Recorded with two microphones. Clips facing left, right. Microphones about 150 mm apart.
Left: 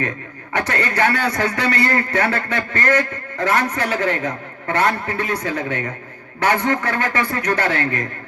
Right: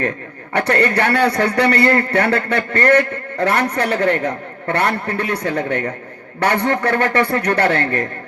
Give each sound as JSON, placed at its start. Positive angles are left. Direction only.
{"t": 0.5, "sound": "a man's voice", "side_deg": -60}